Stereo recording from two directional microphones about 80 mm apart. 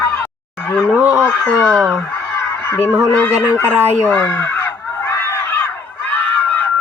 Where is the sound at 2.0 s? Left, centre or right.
Left.